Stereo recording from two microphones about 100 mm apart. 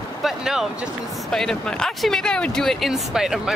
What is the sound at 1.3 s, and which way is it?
Speech, 5° left (ahead or behind).